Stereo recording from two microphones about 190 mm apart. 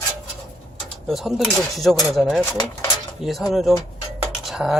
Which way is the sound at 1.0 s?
Centre (ahead or behind).